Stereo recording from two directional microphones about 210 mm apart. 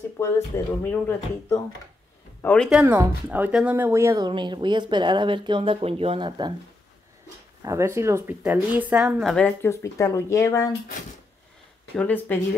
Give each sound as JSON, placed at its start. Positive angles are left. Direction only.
{"t": 0.2, "sound": "speech", "side_deg": 10}
{"t": 2.8, "sound": "speech", "side_deg": -15}
{"t": 7.6, "sound": "speech", "side_deg": -15}
{"t": 12.0, "sound": "speech", "side_deg": 10}